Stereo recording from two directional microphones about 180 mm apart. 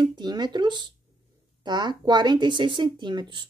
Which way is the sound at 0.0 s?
25° right (ahead or behind).